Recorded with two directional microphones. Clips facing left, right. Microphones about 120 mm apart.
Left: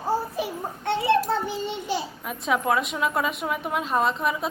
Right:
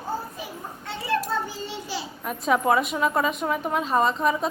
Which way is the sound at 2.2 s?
Centre (ahead or behind).